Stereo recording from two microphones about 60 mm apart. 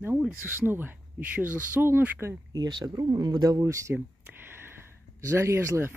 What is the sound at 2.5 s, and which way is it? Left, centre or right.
Speech, right.